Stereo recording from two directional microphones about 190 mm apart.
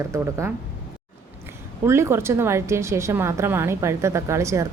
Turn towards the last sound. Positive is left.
turn(degrees=-15)  # may be behind; listen again after turning